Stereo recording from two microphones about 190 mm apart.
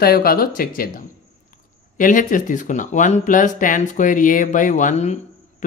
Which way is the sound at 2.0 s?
45° left (ahead or behind).